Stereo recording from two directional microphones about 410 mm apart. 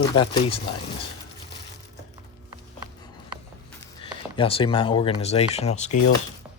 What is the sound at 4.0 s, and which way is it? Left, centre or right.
Speech, centre.